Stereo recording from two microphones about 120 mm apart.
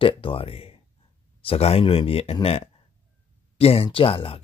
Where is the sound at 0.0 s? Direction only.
50° left (ahead or behind).